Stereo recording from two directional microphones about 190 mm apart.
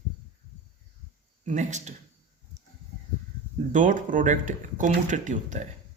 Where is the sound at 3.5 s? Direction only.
40° right (ahead or behind).